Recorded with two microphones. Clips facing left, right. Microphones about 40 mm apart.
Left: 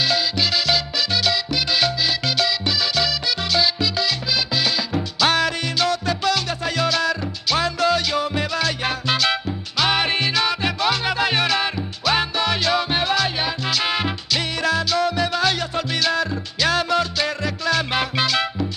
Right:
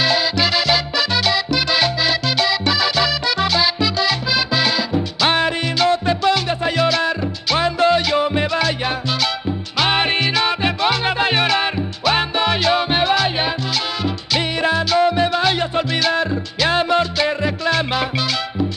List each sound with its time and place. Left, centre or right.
0.0 s music: right